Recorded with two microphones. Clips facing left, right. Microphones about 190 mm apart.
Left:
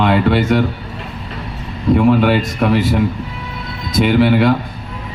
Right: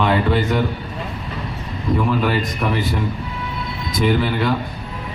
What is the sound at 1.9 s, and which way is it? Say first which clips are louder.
Speech: left 7 dB; 70° left (ahead or behind).